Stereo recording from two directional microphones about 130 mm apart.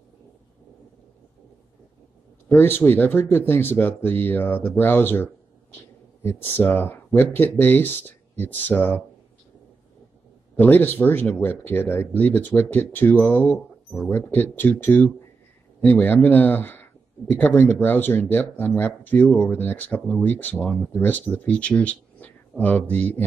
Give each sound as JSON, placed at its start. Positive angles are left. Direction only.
{"t": 2.4, "sound": "speech", "side_deg": 15}
{"t": 10.5, "sound": "speech", "side_deg": 15}